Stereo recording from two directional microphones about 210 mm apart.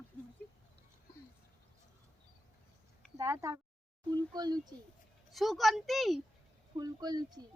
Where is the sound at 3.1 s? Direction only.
15° right (ahead or behind).